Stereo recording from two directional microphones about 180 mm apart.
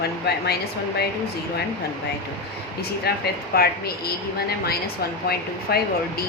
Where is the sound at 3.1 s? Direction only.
60° left (ahead or behind).